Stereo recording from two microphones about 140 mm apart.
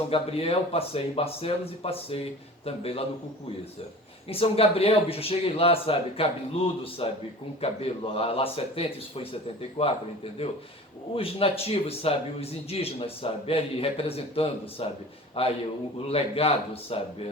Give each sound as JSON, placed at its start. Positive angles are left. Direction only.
{"t": 0.1, "sound": "speech", "side_deg": 45}
{"t": 4.3, "sound": "speech", "side_deg": 45}
{"t": 11.1, "sound": "speech", "side_deg": 40}